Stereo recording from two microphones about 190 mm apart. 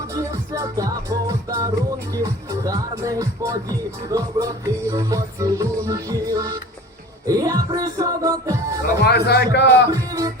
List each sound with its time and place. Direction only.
0.1 s music: 15° right (ahead or behind)
9.0 s a man's voice: 60° left (ahead or behind)
9.9 s music: 20° right (ahead or behind)